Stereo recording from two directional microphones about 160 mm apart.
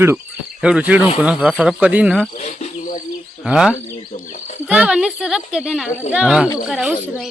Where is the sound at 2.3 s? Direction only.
45° left (ahead or behind).